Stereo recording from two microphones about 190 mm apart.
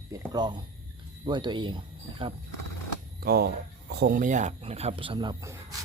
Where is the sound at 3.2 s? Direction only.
55° right (ahead or behind); by 5.5 s 20° right (ahead or behind).